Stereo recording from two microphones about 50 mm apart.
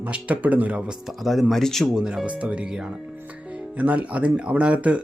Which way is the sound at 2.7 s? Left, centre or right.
Centre.